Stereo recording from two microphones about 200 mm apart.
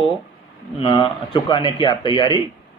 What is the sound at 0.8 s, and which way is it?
A man's voice, 25° left (ahead or behind).